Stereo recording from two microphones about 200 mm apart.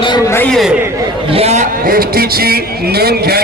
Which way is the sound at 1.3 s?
30° right (ahead or behind).